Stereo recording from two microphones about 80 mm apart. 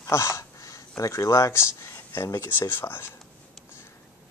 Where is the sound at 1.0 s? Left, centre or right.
Left.